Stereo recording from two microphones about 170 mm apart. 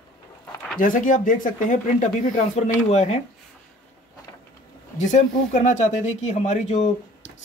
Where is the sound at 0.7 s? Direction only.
50° left (ahead or behind).